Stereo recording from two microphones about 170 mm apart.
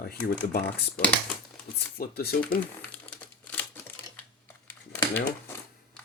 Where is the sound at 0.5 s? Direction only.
65° left (ahead or behind).